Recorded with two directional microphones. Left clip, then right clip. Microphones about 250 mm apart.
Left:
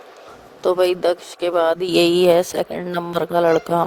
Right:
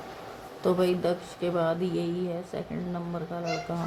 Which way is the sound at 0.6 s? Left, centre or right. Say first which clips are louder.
Left 9 dB; left.